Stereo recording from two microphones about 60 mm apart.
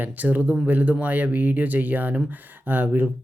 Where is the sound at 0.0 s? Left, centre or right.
Right.